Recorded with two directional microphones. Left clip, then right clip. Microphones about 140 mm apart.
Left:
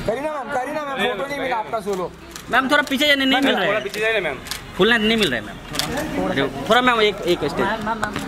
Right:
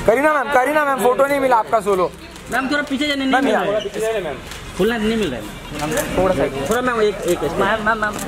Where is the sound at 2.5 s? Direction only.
40° left (ahead or behind).